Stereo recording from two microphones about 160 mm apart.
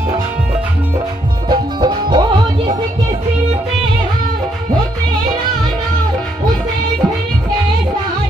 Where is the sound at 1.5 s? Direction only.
25° right (ahead or behind).